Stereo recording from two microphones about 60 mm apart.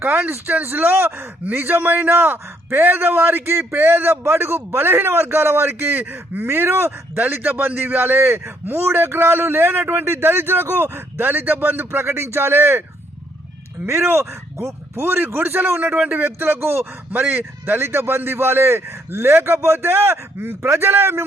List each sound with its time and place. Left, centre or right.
0.3 s speech: right
13.8 s a man's voice: right